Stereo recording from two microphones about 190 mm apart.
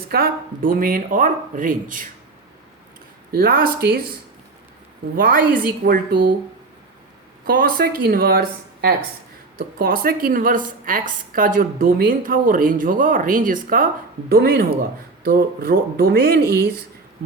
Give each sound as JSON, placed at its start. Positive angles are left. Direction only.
{"t": 0.1, "sound": "speech", "side_deg": -50}
{"t": 3.3, "sound": "speech", "side_deg": -50}
{"t": 5.1, "sound": "speech", "side_deg": -50}
{"t": 7.4, "sound": "speech", "side_deg": -50}